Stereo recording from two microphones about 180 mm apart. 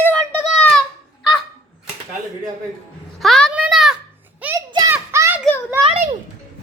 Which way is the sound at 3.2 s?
Centre (ahead or behind).